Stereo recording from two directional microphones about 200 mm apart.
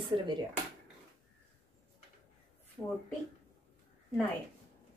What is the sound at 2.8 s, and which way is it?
Speech, 10° left (ahead or behind).